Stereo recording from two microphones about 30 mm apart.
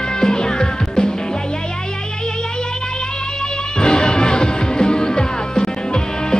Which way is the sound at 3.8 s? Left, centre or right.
Left.